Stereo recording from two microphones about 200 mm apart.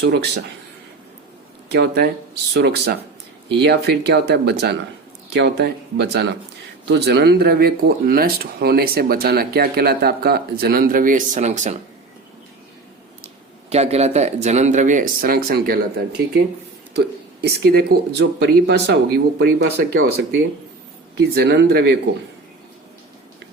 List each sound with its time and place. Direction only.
0.0 s speech: 55° right (ahead or behind)
1.7 s speech: 55° right (ahead or behind); by 11.8 s 35° right (ahead or behind)
13.2 s speech: 30° right (ahead or behind); by 16.2 s 50° right (ahead or behind)
17.4 s speech: 50° right (ahead or behind)
21.3 s speech: 60° right (ahead or behind)